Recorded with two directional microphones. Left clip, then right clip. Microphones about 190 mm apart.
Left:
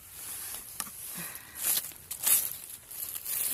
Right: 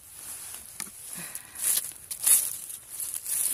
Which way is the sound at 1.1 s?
20° right (ahead or behind).